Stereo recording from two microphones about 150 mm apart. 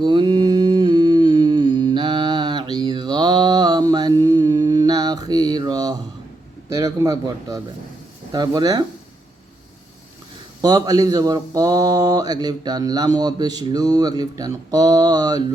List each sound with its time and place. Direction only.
0.0 s humming: 30° right (ahead or behind)
6.7 s speech: 25° right (ahead or behind)
10.6 s speech: 25° right (ahead or behind)